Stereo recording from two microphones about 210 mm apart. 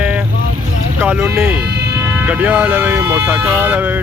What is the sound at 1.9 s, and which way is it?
Speech, 5° right (ahead or behind).